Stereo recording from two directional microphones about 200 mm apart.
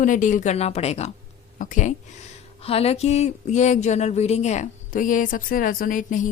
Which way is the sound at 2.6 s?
30° left (ahead or behind).